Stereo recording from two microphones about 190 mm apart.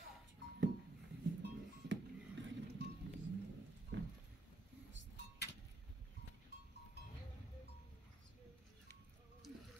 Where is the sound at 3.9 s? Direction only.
75° right (ahead or behind).